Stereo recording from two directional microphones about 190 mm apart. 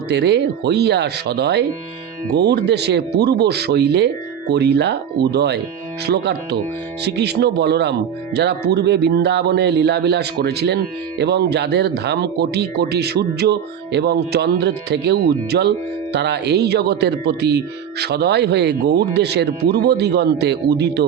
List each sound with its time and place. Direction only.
0.1 s speech: 60° right (ahead or behind)